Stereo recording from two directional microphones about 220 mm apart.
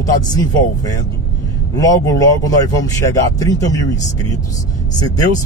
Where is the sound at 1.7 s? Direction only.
15° left (ahead or behind).